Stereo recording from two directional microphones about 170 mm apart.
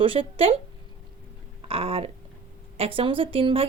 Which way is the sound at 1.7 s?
35° right (ahead or behind).